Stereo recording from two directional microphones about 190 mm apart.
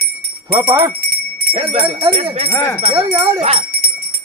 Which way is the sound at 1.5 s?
30° right (ahead or behind).